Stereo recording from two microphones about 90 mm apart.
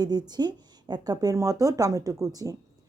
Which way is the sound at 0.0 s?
50° right (ahead or behind).